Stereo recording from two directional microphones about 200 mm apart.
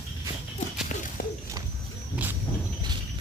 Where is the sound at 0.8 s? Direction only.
40° left (ahead or behind).